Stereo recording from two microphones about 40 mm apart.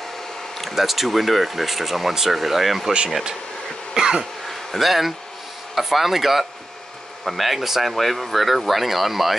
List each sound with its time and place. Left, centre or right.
0.6 s speech: centre
3.9 s throat clearing: centre
4.5 s a sound: centre
5.8 s speech: centre